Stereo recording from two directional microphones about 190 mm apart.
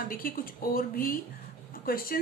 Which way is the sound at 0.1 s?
50° left (ahead or behind).